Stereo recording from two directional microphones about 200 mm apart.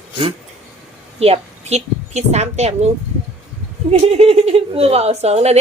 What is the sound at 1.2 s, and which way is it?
A woman's voice, 30° right (ahead or behind).